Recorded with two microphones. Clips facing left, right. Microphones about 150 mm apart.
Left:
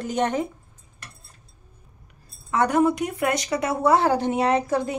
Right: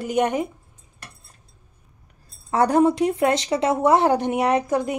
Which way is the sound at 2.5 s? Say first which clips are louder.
Right 3 dB; 35° right (ahead or behind).